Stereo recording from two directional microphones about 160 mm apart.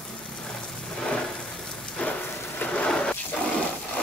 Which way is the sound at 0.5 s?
5° left (ahead or behind).